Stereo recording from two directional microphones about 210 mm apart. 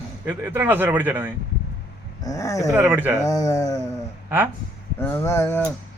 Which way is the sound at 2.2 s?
15° left (ahead or behind).